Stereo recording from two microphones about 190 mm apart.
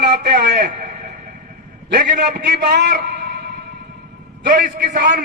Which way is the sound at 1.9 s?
55° right (ahead or behind).